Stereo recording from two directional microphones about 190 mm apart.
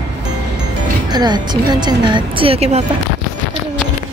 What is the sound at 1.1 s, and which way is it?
Speech, 20° right (ahead or behind).